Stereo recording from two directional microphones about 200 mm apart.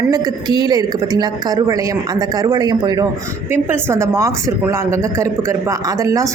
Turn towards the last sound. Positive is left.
turn(degrees=-15)  # may be behind; listen again after turning